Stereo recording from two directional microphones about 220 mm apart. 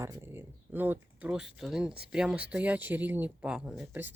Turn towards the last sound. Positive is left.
turn(degrees=-10)  # may be behind; listen again after turning